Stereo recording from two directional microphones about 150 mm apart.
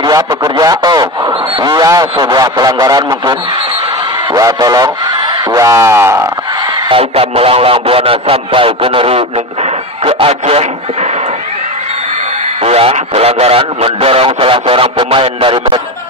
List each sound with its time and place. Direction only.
0.0 s a man's voice: 25° right (ahead or behind)
6.9 s speech: 40° right (ahead or behind)
12.6 s speech: 45° right (ahead or behind)